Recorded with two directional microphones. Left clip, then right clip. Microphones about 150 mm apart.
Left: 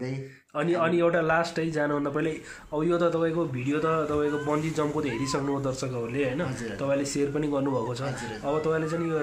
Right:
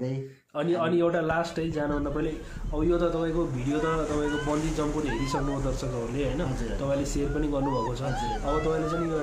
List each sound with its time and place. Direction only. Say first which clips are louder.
0.6 s a man's voice: left 1 dB; 15° left (ahead or behind)
6.9 s a man's voice: left 3 dB; 15° left (ahead or behind)